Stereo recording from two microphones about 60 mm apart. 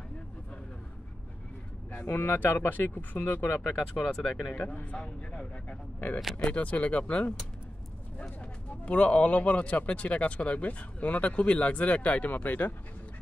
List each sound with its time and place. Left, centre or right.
2.0 s speech: left
3.6 s speech: centre
4.7 s speech: centre